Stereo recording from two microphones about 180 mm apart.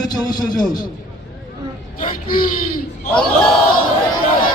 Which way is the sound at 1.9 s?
50° left (ahead or behind).